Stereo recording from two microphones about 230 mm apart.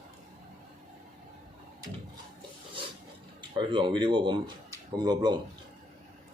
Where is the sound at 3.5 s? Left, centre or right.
Right.